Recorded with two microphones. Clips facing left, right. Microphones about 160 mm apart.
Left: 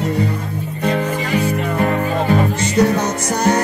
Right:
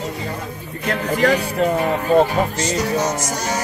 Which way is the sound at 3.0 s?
60° left (ahead or behind).